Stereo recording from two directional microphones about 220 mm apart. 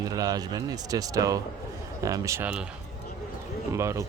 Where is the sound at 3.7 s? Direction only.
15° right (ahead or behind).